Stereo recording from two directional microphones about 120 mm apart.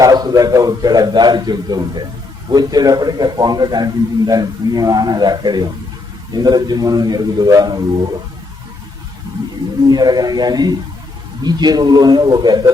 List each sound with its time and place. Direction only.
0.0 s a man's voice: 35° right (ahead or behind)
9.9 s a man's voice: 35° right (ahead or behind)